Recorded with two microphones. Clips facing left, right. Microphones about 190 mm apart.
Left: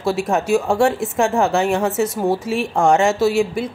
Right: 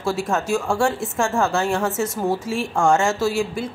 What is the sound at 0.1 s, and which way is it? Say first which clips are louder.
A woman's voice: left 4 dB; 15° left (ahead or behind).